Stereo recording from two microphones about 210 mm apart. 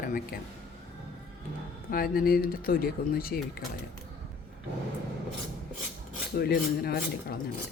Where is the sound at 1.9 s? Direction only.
45° left (ahead or behind).